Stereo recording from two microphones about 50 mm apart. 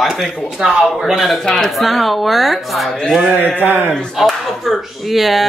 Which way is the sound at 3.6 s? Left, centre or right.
Right.